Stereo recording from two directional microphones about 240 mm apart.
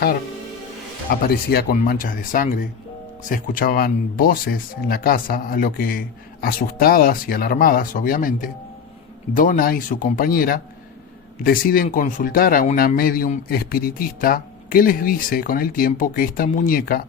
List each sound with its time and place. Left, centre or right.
1.3 s speech: left